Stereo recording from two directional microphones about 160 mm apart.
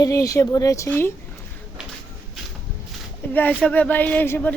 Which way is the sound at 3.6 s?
10° left (ahead or behind).